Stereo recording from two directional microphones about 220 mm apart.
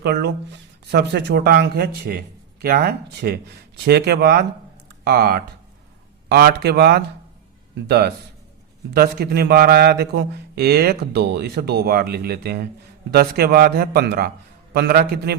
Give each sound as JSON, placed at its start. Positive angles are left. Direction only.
{"t": 0.0, "sound": "speech", "side_deg": -45}